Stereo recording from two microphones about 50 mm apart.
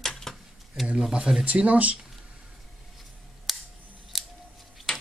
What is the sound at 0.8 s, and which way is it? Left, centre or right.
Speech, centre.